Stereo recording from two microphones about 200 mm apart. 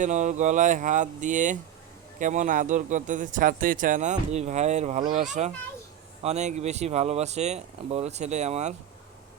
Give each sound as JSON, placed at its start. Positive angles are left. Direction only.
{"t": 0.0, "sound": "speech", "side_deg": -35}